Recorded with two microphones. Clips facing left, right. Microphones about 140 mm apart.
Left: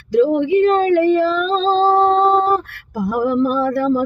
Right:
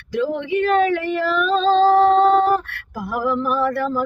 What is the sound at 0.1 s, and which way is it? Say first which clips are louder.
Child singing: left 7 dB; 30° left (ahead or behind).